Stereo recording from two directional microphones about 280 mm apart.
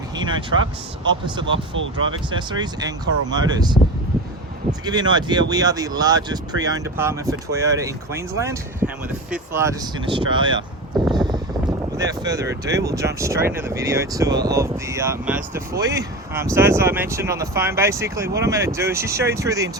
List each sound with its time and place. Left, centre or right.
0.2 s speech: centre
1.5 s speech: right
2.3 s speech: centre
4.9 s speech: centre
11.9 s speech: centre